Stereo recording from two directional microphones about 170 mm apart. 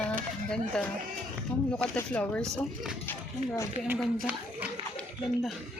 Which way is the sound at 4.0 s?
5° right (ahead or behind).